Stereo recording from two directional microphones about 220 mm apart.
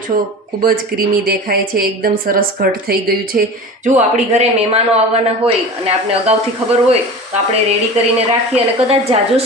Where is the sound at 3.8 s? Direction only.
30° right (ahead or behind).